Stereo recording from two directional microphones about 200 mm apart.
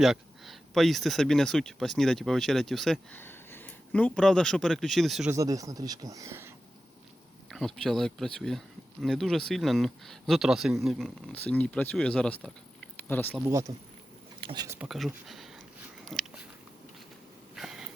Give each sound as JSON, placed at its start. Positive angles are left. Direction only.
{"t": 0.0, "sound": "speech", "side_deg": 0}
{"t": 5.3, "sound": "speech", "side_deg": -15}
{"t": 7.5, "sound": "speech", "side_deg": 0}
{"t": 13.4, "sound": "speech", "side_deg": -15}
{"t": 14.8, "sound": "speech", "side_deg": 0}
{"t": 16.0, "sound": "biting", "side_deg": 0}
{"t": 17.5, "sound": "a sound", "side_deg": 0}